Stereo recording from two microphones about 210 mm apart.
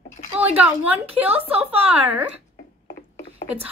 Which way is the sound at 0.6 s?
5° right (ahead or behind).